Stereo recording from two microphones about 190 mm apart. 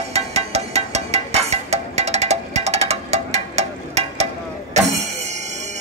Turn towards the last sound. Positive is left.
turn(degrees=-40)  # may be behind; listen again after turning